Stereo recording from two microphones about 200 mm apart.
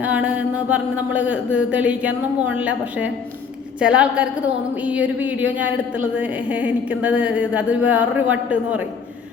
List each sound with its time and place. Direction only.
0.0 s a woman's voice: 5° right (ahead or behind)